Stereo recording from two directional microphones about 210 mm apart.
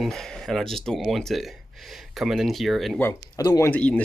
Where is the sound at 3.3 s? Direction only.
15° left (ahead or behind).